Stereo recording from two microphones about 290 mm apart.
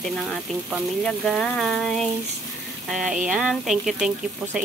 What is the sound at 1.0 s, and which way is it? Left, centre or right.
Speech, centre.